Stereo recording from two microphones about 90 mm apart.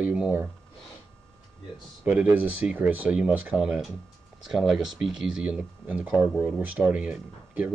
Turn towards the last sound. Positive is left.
turn(degrees=-10)  # may be behind; listen again after turning